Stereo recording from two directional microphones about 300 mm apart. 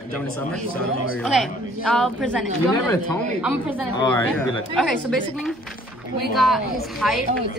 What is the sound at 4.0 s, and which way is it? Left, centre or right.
Speech, centre.